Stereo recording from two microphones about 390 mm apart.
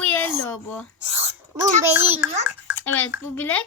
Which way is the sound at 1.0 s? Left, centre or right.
Centre.